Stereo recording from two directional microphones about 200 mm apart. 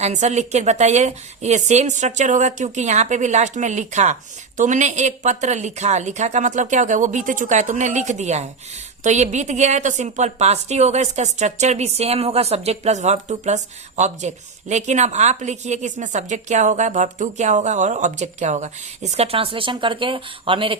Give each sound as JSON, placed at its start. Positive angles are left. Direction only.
{"t": 0.0, "sound": "a woman's voice", "side_deg": -35}